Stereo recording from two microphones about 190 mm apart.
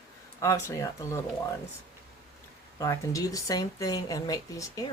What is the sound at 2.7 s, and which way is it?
Speech, 15° left (ahead or behind).